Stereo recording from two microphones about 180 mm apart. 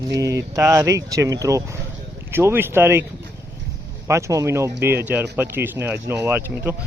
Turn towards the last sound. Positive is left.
turn(degrees=-10)  # may be behind; listen again after turning